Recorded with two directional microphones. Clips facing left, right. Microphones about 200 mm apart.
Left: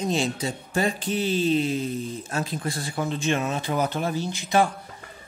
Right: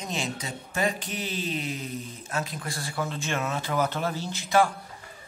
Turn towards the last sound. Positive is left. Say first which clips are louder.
# left 1 dB
turn(degrees=15)  # may be behind; listen again after turning